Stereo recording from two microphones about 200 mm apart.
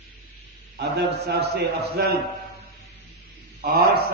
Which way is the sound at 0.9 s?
55° right (ahead or behind).